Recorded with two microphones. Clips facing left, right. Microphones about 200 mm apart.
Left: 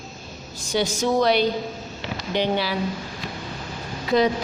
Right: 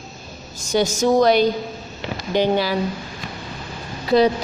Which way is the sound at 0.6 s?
45° right (ahead or behind).